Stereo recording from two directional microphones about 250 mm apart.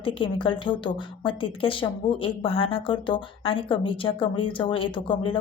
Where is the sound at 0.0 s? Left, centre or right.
Left.